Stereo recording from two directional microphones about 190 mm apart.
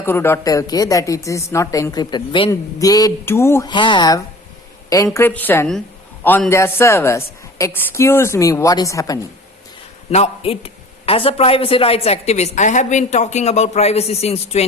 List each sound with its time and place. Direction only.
0.0 s a woman's voice: 10° left (ahead or behind)
5.1 s a woman's voice: 10° left (ahead or behind)
10.1 s speech: 35° left (ahead or behind)